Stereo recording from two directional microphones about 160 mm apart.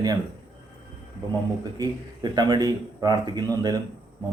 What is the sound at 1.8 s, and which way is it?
Speech, 25° right (ahead or behind).